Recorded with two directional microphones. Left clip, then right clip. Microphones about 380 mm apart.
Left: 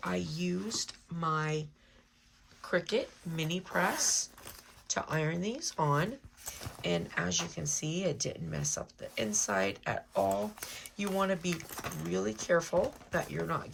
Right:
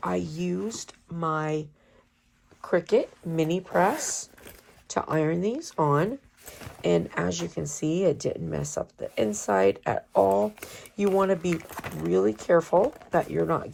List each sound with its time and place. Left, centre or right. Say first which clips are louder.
0.0 s speech: right 7 dB; centre